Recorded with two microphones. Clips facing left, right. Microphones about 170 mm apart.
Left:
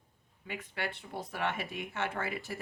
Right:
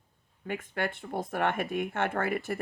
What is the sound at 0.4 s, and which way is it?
Speech, 50° right (ahead or behind).